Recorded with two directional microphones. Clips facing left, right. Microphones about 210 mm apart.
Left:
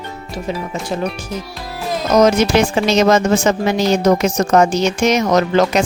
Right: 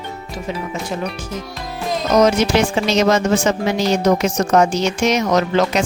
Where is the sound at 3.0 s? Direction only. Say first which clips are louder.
Left 2 dB; 45° left (ahead or behind).